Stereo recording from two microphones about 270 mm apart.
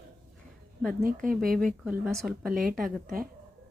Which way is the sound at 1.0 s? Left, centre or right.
Right.